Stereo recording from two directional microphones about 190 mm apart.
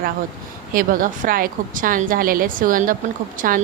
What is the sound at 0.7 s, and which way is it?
A woman's voice, 45° right (ahead or behind).